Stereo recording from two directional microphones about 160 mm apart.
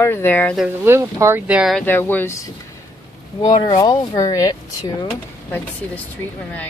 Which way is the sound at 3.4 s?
25° left (ahead or behind).